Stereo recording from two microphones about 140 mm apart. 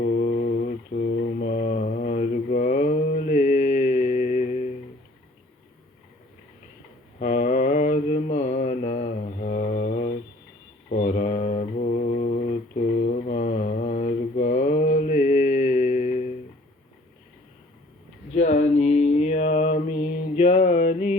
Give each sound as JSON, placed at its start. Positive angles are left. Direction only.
{"t": 0.0, "sound": "mantra", "side_deg": 75}
{"t": 7.2, "sound": "mantra", "side_deg": 65}
{"t": 18.3, "sound": "mantra", "side_deg": 60}